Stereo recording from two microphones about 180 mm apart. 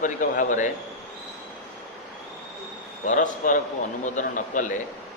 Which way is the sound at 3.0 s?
45° left (ahead or behind).